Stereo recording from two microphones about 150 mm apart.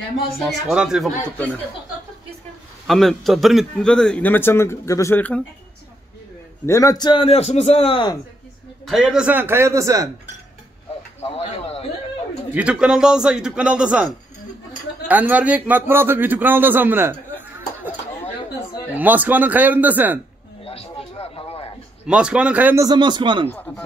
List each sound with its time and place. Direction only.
0.4 s a man's voice: centre (ahead or behind)
2.9 s speech: centre (ahead or behind)
6.6 s a man's voice: 20° left (ahead or behind); by 8.1 s 40° left (ahead or behind)
8.8 s a man's voice: centre (ahead or behind); by 10.0 s 20° right (ahead or behind)
11.1 s a sound: 45° left (ahead or behind)
12.5 s a man's voice: 5° right (ahead or behind)
18.9 s a man's voice: 10° right (ahead or behind)
20.6 s music: 40° left (ahead or behind)
22.0 s a man's voice: 5° right (ahead or behind)
22.8 s speech: 30° right (ahead or behind)